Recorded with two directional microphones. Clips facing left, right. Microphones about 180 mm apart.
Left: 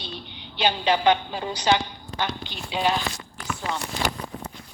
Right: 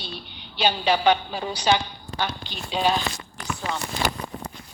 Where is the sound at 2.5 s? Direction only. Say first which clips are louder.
Right 1 dB; 15° left (ahead or behind).